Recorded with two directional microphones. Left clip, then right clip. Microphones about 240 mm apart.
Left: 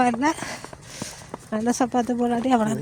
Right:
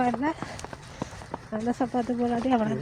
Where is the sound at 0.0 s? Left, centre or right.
Left.